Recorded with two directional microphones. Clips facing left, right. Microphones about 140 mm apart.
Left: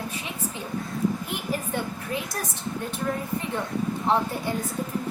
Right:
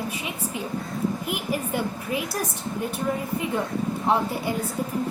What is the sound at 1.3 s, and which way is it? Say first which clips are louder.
A woman's voice: right 2 dB; 10° right (ahead or behind).